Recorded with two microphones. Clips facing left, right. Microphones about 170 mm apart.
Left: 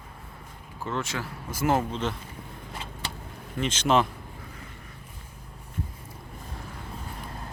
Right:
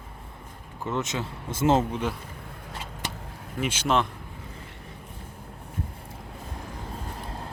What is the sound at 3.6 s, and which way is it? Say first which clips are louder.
Speech: left 1 dB; 10° right (ahead or behind).